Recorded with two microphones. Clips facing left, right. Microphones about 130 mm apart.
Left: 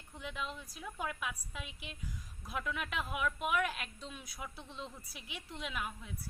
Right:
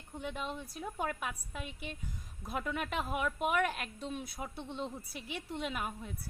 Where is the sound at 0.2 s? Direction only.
45° right (ahead or behind).